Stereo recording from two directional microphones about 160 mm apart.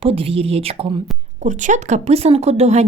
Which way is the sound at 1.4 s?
50° right (ahead or behind).